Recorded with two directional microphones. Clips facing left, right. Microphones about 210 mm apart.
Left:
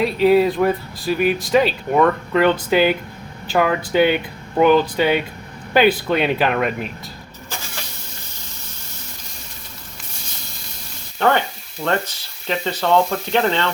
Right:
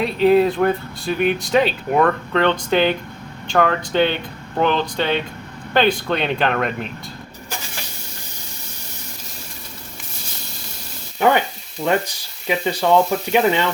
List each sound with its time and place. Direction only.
0.0 s speech: centre (ahead or behind)
11.2 s speech: 10° right (ahead or behind)